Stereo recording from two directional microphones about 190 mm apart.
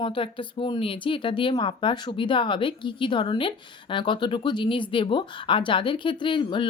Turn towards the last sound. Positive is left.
turn(degrees=25)  # may be behind; listen again after turning